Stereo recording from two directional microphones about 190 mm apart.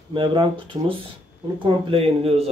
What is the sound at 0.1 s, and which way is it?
Speech, 25° right (ahead or behind).